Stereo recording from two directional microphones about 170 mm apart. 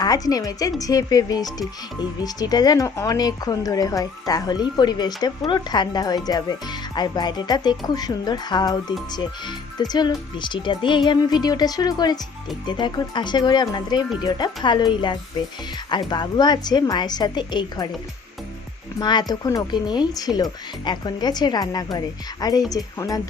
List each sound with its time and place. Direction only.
0.0 s speech: 20° left (ahead or behind)
18.9 s speech: 25° left (ahead or behind)